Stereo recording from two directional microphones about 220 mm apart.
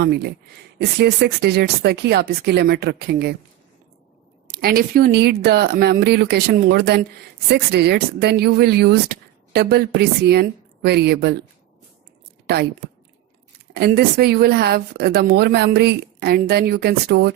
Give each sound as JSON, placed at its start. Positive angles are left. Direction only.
{"t": 0.0, "sound": "speech", "side_deg": -45}
{"t": 4.5, "sound": "speech", "side_deg": -45}
{"t": 13.7, "sound": "speech", "side_deg": -45}